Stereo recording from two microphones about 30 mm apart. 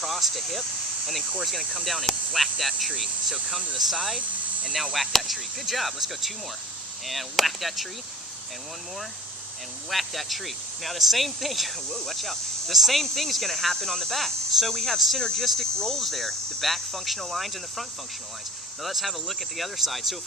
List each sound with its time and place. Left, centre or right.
0.0 s a sound: centre
1.5 s speech: centre
9.9 s speech: centre
15.2 s speech: centre
16.0 s speech: centre